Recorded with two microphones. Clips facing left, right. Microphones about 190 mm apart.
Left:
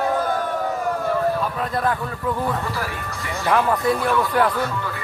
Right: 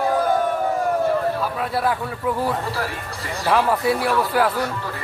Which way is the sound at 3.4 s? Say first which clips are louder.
Even; 5° right (ahead or behind).